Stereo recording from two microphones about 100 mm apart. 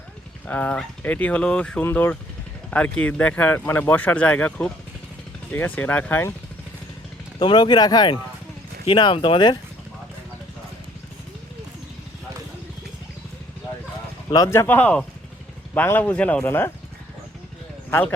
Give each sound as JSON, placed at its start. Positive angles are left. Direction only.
{"t": 0.4, "sound": "speech", "side_deg": 15}
{"t": 1.8, "sound": "speech", "side_deg": 20}
{"t": 7.3, "sound": "speech", "side_deg": 50}
{"t": 8.9, "sound": "speech", "side_deg": 55}
{"t": 14.5, "sound": "speech", "side_deg": 25}
{"t": 16.5, "sound": "speech", "side_deg": 25}